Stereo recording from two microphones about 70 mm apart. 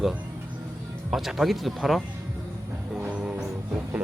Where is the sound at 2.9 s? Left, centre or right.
Centre.